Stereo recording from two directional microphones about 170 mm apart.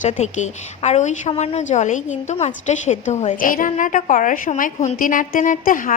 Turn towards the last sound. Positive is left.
turn(degrees=50)  # may be behind; listen again after turning